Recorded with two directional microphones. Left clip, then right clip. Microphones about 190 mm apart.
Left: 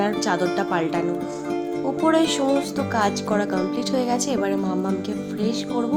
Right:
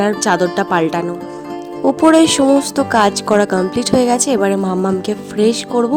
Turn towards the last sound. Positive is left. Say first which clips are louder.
# right 11 dB
turn(degrees=-40)  # may be behind; listen again after turning